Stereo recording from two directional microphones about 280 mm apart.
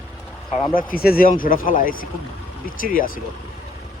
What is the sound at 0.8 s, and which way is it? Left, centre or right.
Speech, left.